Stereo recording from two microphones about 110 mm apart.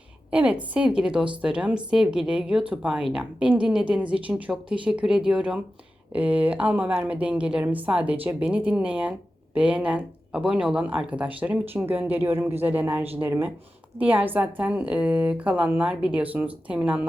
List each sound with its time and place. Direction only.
0.3 s speech: 10° right (ahead or behind)